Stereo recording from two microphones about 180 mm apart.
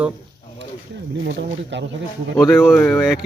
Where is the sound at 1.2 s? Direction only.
80° right.